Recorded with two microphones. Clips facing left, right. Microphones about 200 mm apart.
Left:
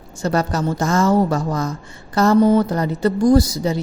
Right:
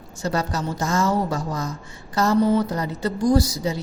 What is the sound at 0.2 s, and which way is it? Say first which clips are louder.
A woman's voice: left 5 dB; 55° left (ahead or behind).